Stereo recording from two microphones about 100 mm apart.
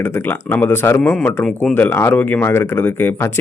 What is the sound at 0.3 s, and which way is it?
Speech, 20° left (ahead or behind).